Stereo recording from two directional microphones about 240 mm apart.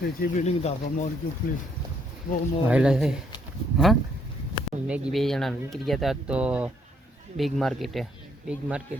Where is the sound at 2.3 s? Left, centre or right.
Left.